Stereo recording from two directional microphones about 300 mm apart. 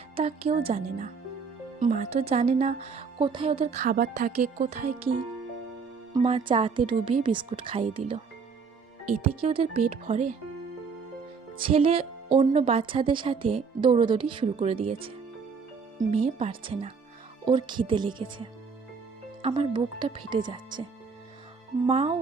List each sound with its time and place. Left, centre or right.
0.2 s speech: centre
6.1 s speech: centre
9.2 s speech: centre
11.6 s speech: centre
21.8 s speech: centre